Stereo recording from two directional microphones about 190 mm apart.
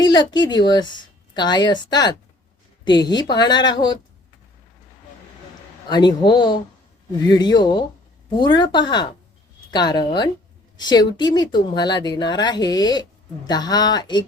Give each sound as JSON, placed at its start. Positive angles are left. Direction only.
{"t": 0.0, "sound": "speech", "side_deg": 20}
{"t": 5.9, "sound": "speech", "side_deg": 20}